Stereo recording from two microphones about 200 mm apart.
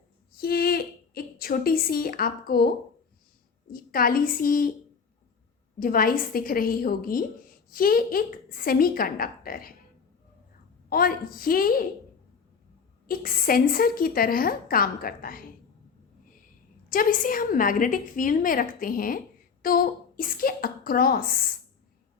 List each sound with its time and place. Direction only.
0.3 s a woman's voice: 50° left (ahead or behind)
3.7 s a woman's voice: 45° left (ahead or behind)
5.8 s a woman's voice: 45° left (ahead or behind)
10.8 s a woman's voice: 45° left (ahead or behind)
13.1 s a woman's voice: 45° left (ahead or behind)
16.9 s a woman's voice: 45° left (ahead or behind)